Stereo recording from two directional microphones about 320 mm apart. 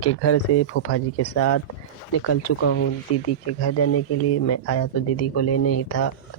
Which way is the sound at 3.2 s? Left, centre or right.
Left.